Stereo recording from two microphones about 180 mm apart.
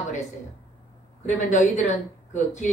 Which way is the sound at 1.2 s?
40° left (ahead or behind).